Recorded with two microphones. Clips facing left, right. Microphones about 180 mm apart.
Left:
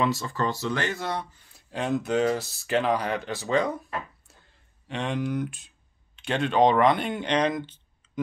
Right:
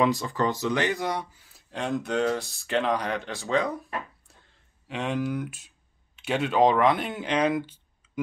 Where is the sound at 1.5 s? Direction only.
Centre (ahead or behind).